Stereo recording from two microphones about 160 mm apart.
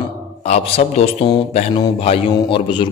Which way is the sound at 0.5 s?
40° left (ahead or behind).